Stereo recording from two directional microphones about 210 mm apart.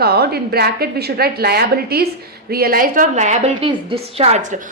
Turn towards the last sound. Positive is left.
turn(degrees=-35)  # may be behind; listen again after turning